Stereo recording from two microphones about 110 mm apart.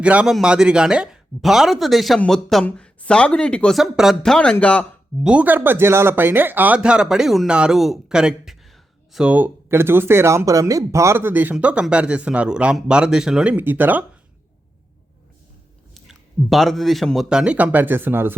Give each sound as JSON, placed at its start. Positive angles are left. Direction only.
{"t": 0.0, "sound": "speech", "side_deg": -10}
{"t": 3.8, "sound": "speech", "side_deg": 0}
{"t": 5.2, "sound": "speech", "side_deg": -10}
{"t": 16.0, "sound": "speech", "side_deg": 0}